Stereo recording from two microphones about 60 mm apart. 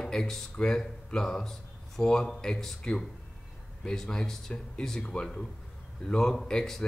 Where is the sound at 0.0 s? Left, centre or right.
Centre.